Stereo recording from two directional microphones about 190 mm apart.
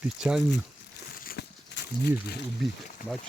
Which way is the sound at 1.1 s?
50° left (ahead or behind).